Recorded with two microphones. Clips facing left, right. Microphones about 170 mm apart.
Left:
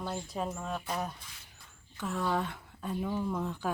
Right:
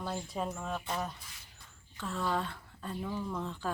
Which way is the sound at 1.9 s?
15° left (ahead or behind).